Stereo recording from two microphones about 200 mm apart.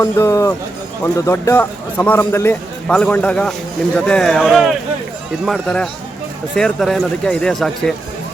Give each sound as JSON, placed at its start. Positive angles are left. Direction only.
{"t": 0.0, "sound": "a man's voice", "side_deg": 15}